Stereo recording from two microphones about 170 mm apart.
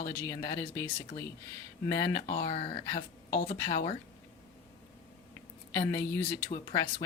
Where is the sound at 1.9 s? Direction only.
25° left (ahead or behind).